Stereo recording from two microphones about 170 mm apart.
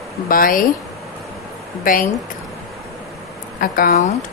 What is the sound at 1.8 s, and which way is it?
Speech, 55° left (ahead or behind).